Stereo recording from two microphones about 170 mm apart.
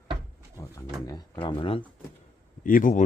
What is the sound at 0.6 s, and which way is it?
Pigeon, 15° left (ahead or behind).